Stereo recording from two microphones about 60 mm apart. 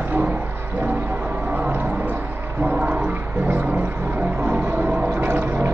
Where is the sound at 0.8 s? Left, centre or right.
Right.